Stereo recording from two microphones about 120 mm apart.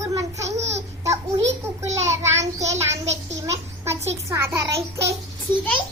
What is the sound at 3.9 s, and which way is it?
A child's voice, 25° right (ahead or behind).